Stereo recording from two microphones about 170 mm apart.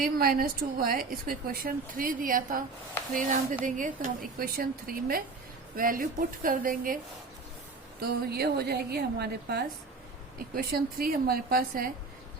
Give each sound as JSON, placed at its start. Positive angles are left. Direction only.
{"t": 0.0, "sound": "a woman's voice", "side_deg": -60}
{"t": 8.3, "sound": "a woman's voice", "side_deg": -70}
{"t": 10.3, "sound": "a woman's voice", "side_deg": -60}